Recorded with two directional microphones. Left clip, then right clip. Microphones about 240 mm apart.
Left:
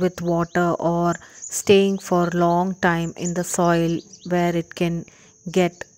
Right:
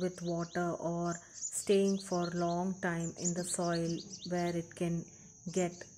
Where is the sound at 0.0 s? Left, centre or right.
Left.